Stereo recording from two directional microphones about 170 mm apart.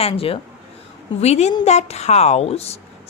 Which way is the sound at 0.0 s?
35° left (ahead or behind).